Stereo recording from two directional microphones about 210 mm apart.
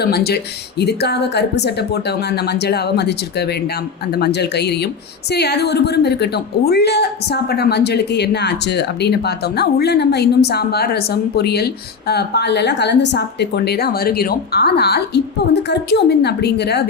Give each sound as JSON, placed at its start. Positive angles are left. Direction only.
{"t": 0.0, "sound": "a woman's voice", "side_deg": 50}